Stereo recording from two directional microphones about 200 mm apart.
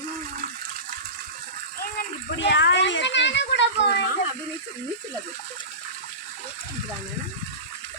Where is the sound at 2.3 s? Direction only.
60° left (ahead or behind).